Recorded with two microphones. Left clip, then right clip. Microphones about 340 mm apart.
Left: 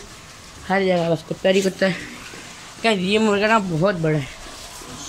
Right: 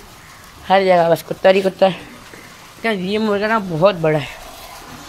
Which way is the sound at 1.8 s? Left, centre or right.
Centre.